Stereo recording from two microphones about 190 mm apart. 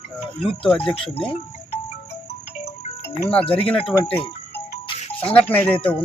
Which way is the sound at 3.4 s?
30° left (ahead or behind).